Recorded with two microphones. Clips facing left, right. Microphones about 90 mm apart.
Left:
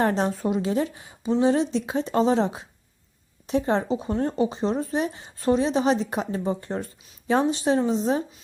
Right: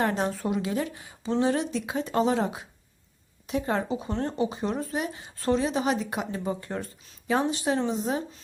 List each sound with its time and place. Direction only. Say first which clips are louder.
0.0 s speech: left 4 dB; 30° left (ahead or behind)